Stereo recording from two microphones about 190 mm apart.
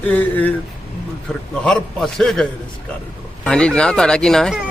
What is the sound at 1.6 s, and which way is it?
Speech, 5° left (ahead or behind).